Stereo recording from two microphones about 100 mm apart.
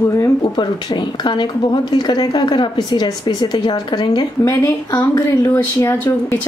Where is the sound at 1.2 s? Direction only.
45° left (ahead or behind).